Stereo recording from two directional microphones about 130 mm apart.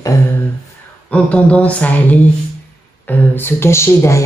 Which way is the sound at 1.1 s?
10° left (ahead or behind).